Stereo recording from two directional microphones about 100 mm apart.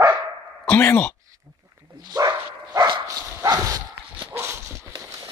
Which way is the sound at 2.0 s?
40° right (ahead or behind).